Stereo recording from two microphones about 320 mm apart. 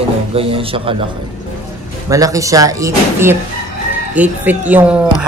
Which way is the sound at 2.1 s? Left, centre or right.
Centre.